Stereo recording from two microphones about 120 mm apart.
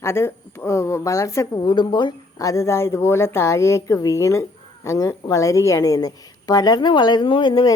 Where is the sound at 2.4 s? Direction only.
25° left (ahead or behind).